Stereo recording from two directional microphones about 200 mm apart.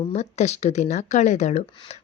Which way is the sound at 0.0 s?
30° left (ahead or behind).